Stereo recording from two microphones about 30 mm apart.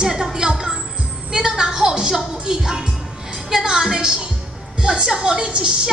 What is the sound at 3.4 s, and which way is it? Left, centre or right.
A woman's voice, right.